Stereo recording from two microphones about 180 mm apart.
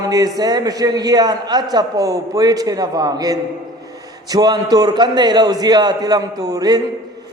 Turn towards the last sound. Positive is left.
turn(degrees=-20)  # may be behind; listen again after turning